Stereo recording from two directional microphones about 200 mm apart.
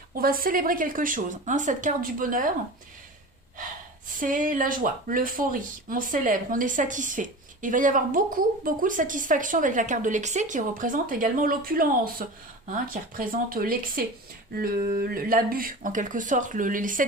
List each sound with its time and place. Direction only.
0.1 s speech: 45° right (ahead or behind)
4.1 s speech: 40° right (ahead or behind)